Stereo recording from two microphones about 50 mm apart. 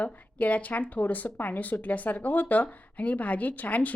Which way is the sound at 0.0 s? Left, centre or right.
Left.